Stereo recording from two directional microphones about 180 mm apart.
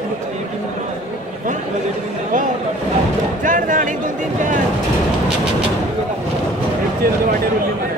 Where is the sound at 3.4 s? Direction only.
45° right (ahead or behind).